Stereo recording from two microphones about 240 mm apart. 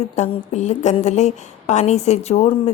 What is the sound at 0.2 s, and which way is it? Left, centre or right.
A woman's voice, left.